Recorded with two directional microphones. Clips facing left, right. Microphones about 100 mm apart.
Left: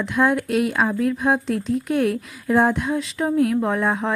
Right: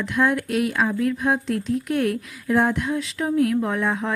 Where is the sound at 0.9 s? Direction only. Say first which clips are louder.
Left 2 dB; 35° left (ahead or behind).